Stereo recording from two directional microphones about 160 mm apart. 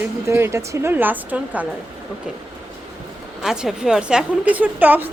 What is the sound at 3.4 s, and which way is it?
Speech, 5° right (ahead or behind).